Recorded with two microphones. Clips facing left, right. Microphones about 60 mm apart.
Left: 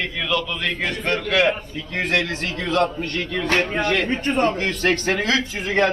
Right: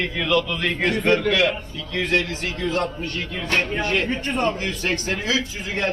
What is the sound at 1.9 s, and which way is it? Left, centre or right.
A man's voice, left.